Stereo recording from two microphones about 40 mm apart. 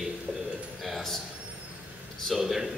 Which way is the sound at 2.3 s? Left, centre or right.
Centre.